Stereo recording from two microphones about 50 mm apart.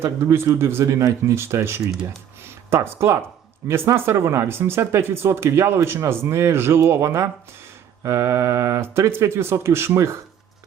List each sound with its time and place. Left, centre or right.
0.0 s speech: right